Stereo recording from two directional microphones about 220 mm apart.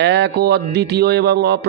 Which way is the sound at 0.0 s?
50° right (ahead or behind).